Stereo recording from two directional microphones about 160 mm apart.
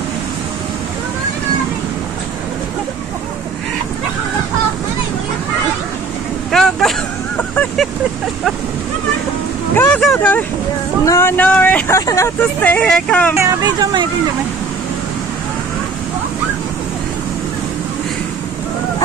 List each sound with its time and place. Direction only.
6.5 s vehicle: centre (ahead or behind)
9.8 s vehicle: 5° left (ahead or behind)
13.4 s speech: 25° right (ahead or behind)